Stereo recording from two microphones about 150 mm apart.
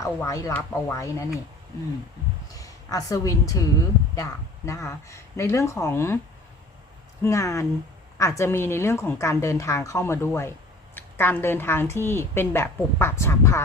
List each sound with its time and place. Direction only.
0.0 s a woman's voice: 20° left (ahead or behind)
2.5 s a woman's voice: 25° left (ahead or behind)
7.2 s a woman's voice: 20° left (ahead or behind)